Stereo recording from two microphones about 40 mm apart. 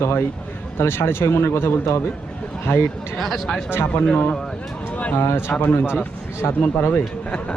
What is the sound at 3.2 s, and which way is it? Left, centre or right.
Speech, centre.